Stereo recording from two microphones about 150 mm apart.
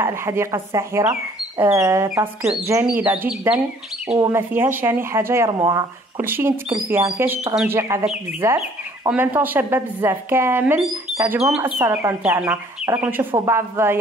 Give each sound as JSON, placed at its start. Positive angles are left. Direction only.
{"t": 0.0, "sound": "speech", "side_deg": -15}